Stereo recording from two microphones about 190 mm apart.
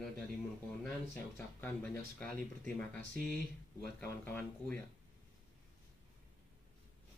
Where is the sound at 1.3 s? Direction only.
5° left (ahead or behind).